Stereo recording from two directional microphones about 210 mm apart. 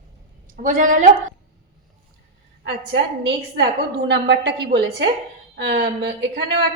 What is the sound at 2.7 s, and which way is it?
A woman's voice, 55° right (ahead or behind).